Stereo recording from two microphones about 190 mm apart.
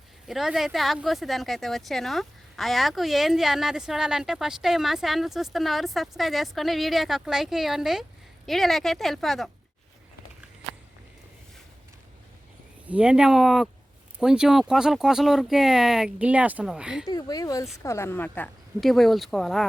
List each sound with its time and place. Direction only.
0.3 s speech: centre (ahead or behind)
12.9 s speech: 5° right (ahead or behind)
17.1 s speech: 20° left (ahead or behind); by 19.6 s centre (ahead or behind)